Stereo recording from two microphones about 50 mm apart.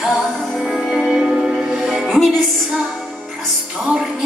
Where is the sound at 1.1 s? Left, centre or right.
Centre.